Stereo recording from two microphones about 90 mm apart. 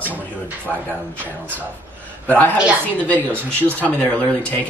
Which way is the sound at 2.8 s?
15° left (ahead or behind).